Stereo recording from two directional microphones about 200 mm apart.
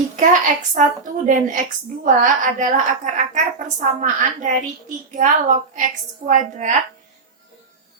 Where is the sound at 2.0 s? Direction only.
40° right (ahead or behind).